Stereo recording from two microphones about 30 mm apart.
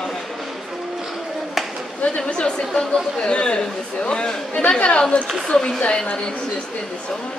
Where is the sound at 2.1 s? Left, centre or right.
Left.